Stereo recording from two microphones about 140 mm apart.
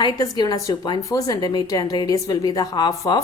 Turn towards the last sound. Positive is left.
turn(degrees=30)  # may be behind; listen again after turning